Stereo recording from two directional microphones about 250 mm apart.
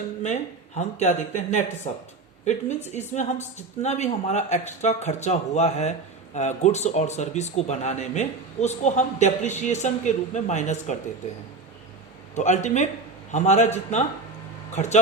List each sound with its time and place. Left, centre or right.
0.2 s a man's voice: left
2.9 s a man's voice: left
12.3 s a man's voice: left